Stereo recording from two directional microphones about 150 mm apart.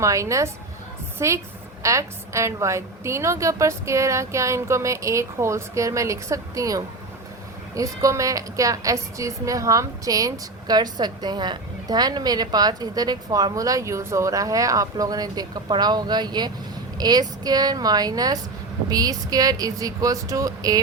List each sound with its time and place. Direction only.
0.0 s a woman's voice: 20° right (ahead or behind)